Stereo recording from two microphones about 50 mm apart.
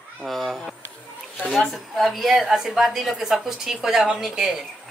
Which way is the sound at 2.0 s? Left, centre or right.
Centre.